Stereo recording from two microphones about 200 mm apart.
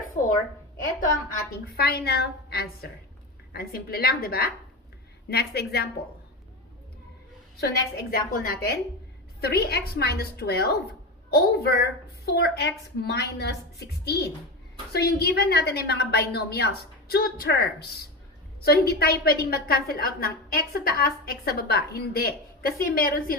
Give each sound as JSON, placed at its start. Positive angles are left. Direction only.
{"t": 0.2, "sound": "a sound", "side_deg": 35}
{"t": 1.7, "sound": "a woman's voice", "side_deg": 50}
{"t": 7.6, "sound": "a woman's voice", "side_deg": 50}